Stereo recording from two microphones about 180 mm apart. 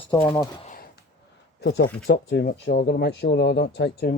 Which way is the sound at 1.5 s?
70° left (ahead or behind).